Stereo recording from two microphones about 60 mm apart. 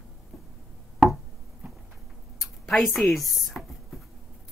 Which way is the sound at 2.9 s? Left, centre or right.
Centre.